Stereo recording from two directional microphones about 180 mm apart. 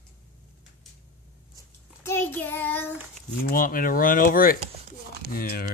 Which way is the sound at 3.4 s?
50° left (ahead or behind).